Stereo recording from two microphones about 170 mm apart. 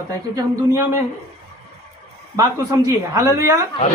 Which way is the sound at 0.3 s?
20° right (ahead or behind).